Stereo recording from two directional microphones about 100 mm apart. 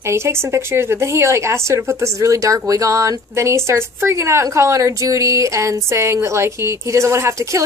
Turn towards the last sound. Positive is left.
turn(degrees=-30)  # may be behind; listen again after turning